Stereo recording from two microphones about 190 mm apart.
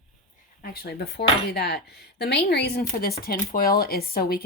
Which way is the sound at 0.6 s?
55° left (ahead or behind).